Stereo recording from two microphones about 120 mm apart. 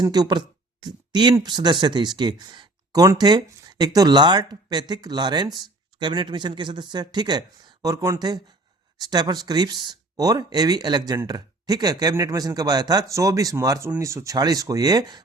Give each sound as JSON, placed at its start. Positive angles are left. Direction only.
{"t": 0.0, "sound": "speech", "side_deg": -35}